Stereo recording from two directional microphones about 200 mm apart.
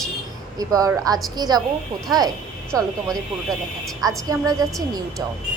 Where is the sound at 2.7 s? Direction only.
15° right (ahead or behind).